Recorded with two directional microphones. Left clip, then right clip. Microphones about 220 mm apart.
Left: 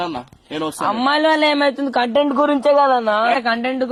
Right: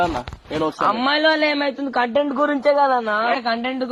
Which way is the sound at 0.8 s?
Centre (ahead or behind).